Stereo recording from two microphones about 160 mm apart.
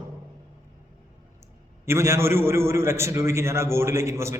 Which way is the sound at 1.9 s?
15° right (ahead or behind).